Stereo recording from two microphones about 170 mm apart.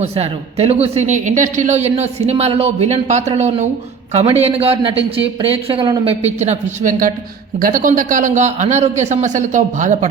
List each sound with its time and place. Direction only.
0.0 s speech: 35° right (ahead or behind)
6.2 s a man's voice: 40° right (ahead or behind)